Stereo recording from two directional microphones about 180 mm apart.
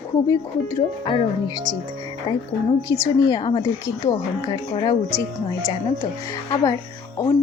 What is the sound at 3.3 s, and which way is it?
Speech, 25° left (ahead or behind).